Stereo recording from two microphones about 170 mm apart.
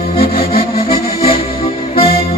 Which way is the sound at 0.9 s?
30° left (ahead or behind).